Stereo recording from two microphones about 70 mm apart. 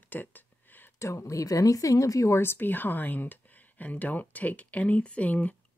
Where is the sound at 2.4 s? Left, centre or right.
Left.